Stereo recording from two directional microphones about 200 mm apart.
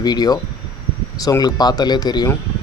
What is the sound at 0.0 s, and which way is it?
Speech, 20° left (ahead or behind).